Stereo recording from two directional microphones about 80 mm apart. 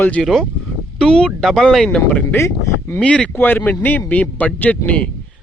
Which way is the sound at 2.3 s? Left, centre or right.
Left.